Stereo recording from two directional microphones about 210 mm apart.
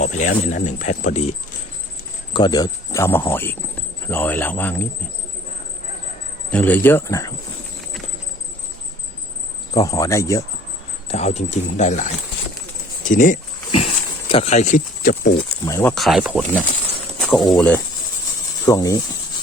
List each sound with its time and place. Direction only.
0.0 s speech: 35° left (ahead or behind)
2.3 s speech: 20° left (ahead or behind)
6.5 s speech: 5° left (ahead or behind)
9.7 s speech: 15° left (ahead or behind)
11.1 s speech: 30° left (ahead or behind)
13.1 s speech: 40° left (ahead or behind)
14.3 s speech: 30° left (ahead or behind)
15.6 s speech: 15° left (ahead or behind)
16.0 s speech: centre (ahead or behind)
17.2 s a sound: centre (ahead or behind)
17.5 s speech: 5° left (ahead or behind)
18.6 s speech: 15° left (ahead or behind)